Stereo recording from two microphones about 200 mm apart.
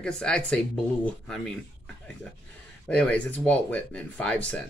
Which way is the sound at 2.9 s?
5° left (ahead or behind).